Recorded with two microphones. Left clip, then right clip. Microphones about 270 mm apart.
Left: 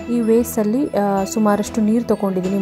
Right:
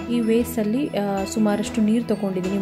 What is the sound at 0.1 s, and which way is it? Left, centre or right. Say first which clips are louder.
Speech: left 5 dB; centre.